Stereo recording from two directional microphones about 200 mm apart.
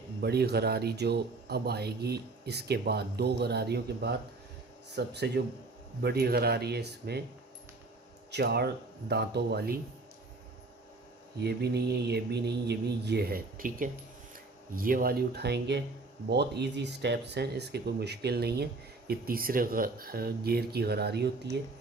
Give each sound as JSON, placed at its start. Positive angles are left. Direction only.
{"t": 0.2, "sound": "speech", "side_deg": -55}
{"t": 8.3, "sound": "speech", "side_deg": -55}
{"t": 11.4, "sound": "speech", "side_deg": -55}